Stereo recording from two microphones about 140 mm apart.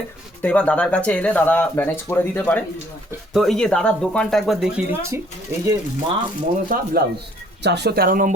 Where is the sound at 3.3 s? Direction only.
Centre (ahead or behind).